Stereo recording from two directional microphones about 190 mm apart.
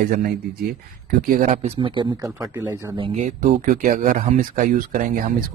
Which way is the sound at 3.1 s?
40° right (ahead or behind).